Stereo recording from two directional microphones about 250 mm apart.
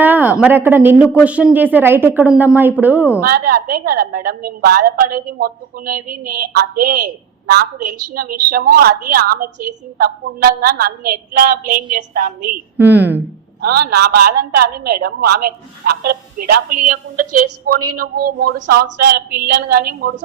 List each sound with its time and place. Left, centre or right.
0.0 s a man's voice: centre
3.2 s a woman's voice: right
7.8 s a woman's voice: right
8.1 s a woman's voice: right
12.7 s a woman's voice: centre
13.6 s a woman's voice: right
17.2 s a woman's voice: right
17.9 s a woman's voice: right